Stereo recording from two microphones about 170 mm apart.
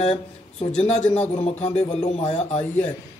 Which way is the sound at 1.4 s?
40° left (ahead or behind).